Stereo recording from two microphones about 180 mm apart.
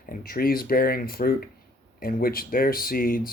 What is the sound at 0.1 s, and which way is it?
Speech, 55° left (ahead or behind).